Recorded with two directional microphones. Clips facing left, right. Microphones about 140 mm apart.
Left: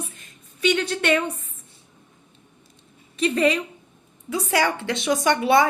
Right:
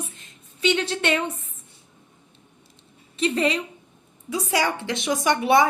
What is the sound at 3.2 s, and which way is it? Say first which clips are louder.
A woman's voice: left 2 dB; 25° right (ahead or behind).